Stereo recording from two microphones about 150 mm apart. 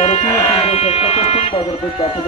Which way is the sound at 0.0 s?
40° left (ahead or behind).